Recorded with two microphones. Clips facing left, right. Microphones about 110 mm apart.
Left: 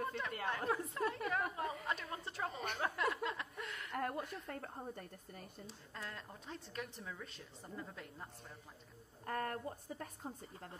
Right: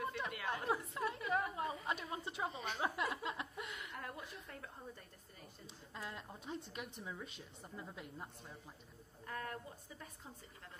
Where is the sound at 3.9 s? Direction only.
55° left (ahead or behind).